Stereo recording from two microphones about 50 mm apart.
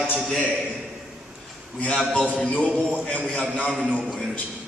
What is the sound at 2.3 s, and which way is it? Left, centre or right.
Speech, left.